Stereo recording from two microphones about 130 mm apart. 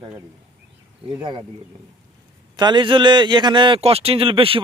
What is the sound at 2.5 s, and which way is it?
A man's voice, 35° right (ahead or behind).